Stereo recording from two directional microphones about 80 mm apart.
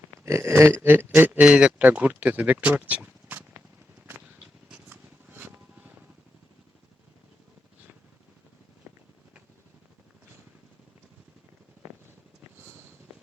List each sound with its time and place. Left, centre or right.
0.3 s speech: right
4.1 s vehicle: right
8.8 s a sound: right